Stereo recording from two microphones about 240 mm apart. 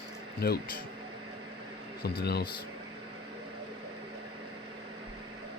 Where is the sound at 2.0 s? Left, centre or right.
Left.